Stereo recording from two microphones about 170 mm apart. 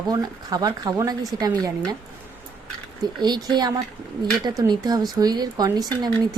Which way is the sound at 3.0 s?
25° right (ahead or behind).